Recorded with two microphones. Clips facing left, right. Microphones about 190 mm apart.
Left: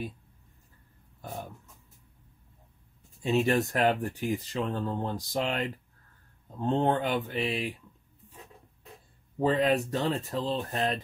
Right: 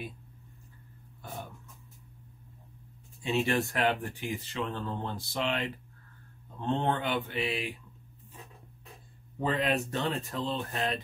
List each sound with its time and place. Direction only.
3.2 s speech: 40° left (ahead or behind)
6.6 s speech: 40° left (ahead or behind)
9.4 s speech: 35° left (ahead or behind)